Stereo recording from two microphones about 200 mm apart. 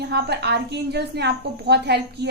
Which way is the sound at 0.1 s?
55° right (ahead or behind).